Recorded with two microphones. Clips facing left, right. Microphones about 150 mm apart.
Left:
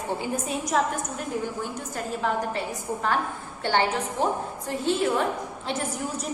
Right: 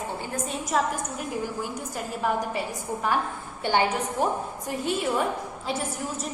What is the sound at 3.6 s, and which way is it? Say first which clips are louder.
A woman's voice: even; 15° right (ahead or behind).